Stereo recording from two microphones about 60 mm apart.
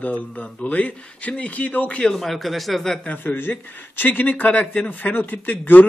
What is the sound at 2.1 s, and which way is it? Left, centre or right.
Speech, centre.